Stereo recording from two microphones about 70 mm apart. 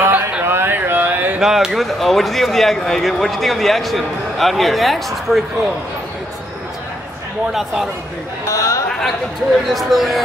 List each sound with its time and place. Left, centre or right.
0.0 s a sound: right
0.5 s a sound: right
1.4 s speech: centre
7.5 s speech: centre
8.5 s speech: left
9.7 s speech: centre